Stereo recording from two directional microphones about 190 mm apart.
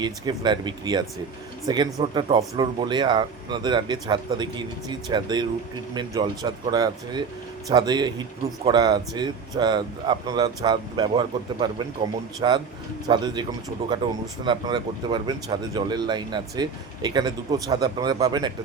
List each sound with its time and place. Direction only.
0.0 s speech: 25° right (ahead or behind)